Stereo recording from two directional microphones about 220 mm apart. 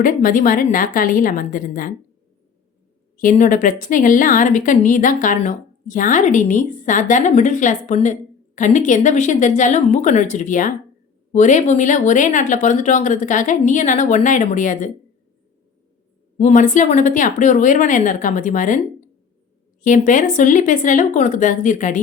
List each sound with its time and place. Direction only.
0.0 s speech: 40° left (ahead or behind)
3.2 s speech: 35° left (ahead or behind)
16.4 s speech: 35° left (ahead or behind)
19.8 s speech: 35° left (ahead or behind)